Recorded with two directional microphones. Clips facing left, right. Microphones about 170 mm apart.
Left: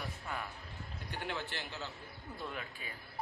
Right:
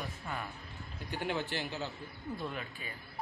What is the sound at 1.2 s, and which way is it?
Speech, 15° right (ahead or behind).